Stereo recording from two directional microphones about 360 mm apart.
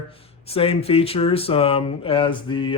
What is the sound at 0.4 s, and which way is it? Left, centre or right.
Speech, centre.